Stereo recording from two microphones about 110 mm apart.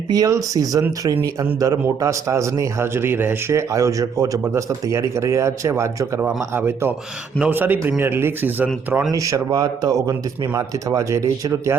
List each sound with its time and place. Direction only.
0.1 s speech: 35° right (ahead or behind)
6.1 s a man's voice: 15° right (ahead or behind)
9.1 s speech: 30° right (ahead or behind)